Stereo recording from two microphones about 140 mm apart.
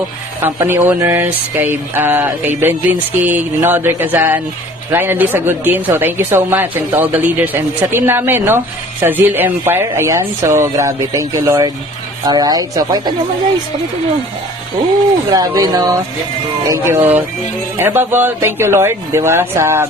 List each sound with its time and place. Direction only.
0.4 s speech: 15° right (ahead or behind)
15.3 s speech: 30° right (ahead or behind)